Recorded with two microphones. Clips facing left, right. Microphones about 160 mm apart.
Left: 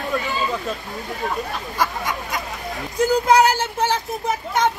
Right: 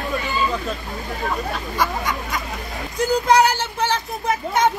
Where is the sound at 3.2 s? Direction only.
Centre (ahead or behind).